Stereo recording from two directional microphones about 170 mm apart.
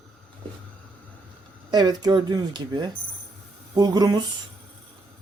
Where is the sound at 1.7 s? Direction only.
25° right (ahead or behind).